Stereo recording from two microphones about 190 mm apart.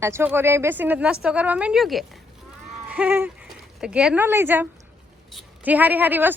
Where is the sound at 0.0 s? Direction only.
10° right (ahead or behind).